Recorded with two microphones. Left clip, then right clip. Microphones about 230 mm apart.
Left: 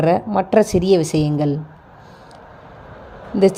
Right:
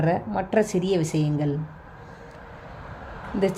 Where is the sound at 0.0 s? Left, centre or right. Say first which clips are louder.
Left 8 dB; left.